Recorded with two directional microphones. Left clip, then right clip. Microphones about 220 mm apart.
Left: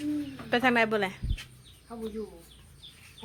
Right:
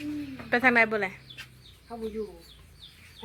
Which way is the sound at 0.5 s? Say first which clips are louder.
Right 2 dB; 10° left (ahead or behind).